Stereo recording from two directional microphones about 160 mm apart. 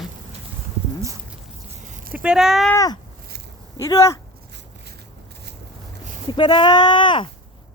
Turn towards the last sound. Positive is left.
turn(degrees=30)  # may be behind; listen again after turning